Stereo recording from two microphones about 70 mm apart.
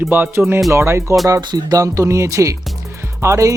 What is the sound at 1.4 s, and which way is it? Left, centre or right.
Speech, right.